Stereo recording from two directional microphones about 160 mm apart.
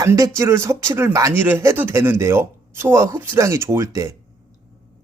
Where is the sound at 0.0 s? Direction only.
20° right (ahead or behind).